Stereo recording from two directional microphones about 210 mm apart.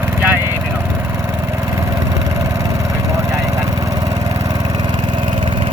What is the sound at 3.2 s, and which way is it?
Vehicle, 15° right (ahead or behind).